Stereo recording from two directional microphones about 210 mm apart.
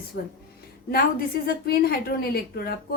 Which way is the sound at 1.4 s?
45° left (ahead or behind).